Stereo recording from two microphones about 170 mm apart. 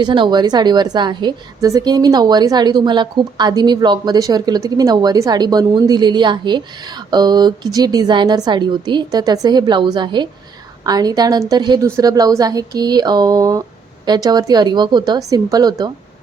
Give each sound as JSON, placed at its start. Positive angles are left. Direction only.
{"t": 0.0, "sound": "a woman's voice", "side_deg": -25}